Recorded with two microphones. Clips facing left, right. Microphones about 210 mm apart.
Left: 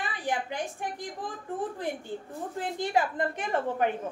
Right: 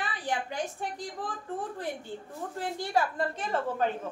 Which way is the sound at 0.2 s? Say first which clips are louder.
Left 2 dB; 15° left (ahead or behind).